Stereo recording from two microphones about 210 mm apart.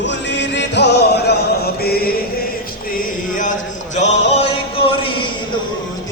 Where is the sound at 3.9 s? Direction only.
35° left (ahead or behind).